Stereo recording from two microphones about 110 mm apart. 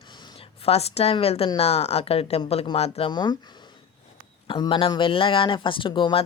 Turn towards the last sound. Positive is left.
turn(degrees=50)  # may be behind; listen again after turning